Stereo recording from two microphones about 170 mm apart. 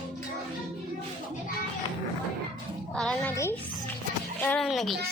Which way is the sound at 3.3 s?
15° left (ahead or behind).